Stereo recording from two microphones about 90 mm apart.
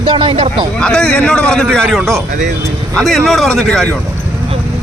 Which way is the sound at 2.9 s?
5° left (ahead or behind).